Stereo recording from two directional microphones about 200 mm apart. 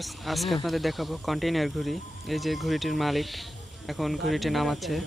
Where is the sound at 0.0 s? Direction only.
Centre (ahead or behind).